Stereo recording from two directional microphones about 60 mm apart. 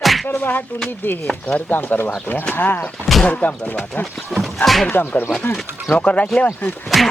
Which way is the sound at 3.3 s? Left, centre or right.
Left.